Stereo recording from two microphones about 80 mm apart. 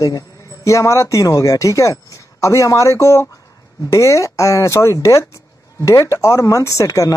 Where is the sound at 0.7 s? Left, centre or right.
Left.